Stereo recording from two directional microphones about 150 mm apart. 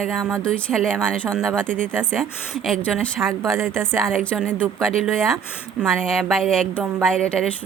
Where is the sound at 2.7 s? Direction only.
5° left (ahead or behind).